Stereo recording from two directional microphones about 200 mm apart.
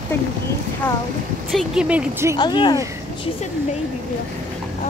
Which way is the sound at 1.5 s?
Centre (ahead or behind).